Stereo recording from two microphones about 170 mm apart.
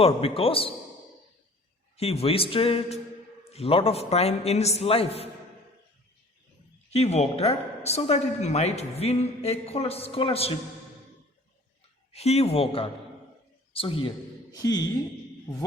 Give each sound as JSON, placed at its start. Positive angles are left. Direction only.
{"t": 0.0, "sound": "a woman's voice", "side_deg": 35}
{"t": 2.0, "sound": "a woman's voice", "side_deg": 35}
{"t": 6.9, "sound": "a woman's voice", "side_deg": 40}
{"t": 12.1, "sound": "a woman's voice", "side_deg": 40}
{"t": 14.5, "sound": "speech", "side_deg": 20}